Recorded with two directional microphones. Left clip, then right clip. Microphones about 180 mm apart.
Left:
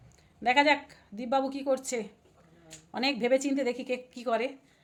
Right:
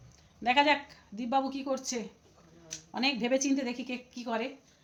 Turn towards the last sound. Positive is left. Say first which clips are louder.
# left 5 dB
turn(degrees=45)  # may be behind; listen again after turning